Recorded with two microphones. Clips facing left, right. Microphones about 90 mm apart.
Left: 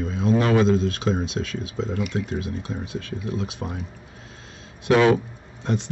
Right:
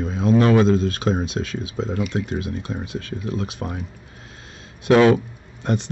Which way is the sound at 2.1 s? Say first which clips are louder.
Right 2 dB; 65° right (ahead or behind).